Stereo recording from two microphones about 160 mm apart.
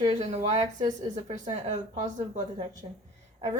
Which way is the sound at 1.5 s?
40° right (ahead or behind).